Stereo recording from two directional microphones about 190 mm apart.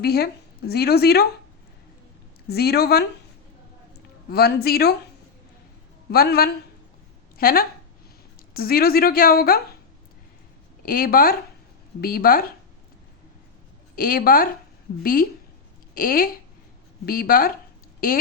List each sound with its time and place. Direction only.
0.0 s speech: 55° left (ahead or behind)
2.5 s speech: 55° left (ahead or behind)
4.3 s speech: 55° left (ahead or behind)
6.1 s a woman's voice: 55° left (ahead or behind)
10.8 s a woman's voice: 50° left (ahead or behind)
13.9 s a woman's voice: 50° left (ahead or behind)